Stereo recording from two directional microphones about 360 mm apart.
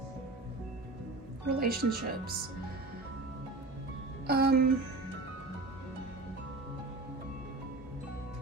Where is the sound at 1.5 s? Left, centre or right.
Right.